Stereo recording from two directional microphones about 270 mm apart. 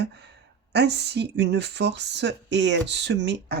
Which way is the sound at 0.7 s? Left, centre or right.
Right.